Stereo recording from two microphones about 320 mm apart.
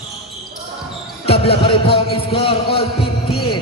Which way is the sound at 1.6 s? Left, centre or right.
Centre.